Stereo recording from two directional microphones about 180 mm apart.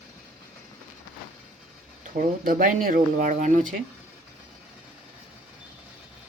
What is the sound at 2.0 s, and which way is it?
Speech, 45° right (ahead or behind).